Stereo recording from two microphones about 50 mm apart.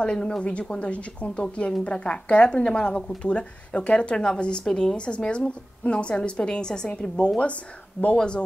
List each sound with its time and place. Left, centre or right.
0.0 s speech: centre
1.4 s a woman's voice: centre
1.9 s a woman's voice: left
8.0 s speech: left